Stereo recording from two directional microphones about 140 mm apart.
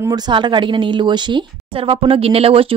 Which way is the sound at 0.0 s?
30° right (ahead or behind).